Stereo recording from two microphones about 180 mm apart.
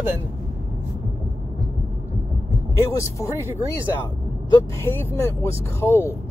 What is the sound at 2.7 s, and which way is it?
Speech, 15° left (ahead or behind).